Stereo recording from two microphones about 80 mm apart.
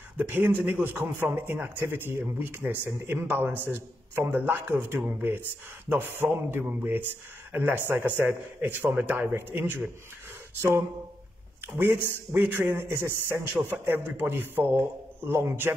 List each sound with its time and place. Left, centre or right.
0.2 s speech: right
11.6 s speech: right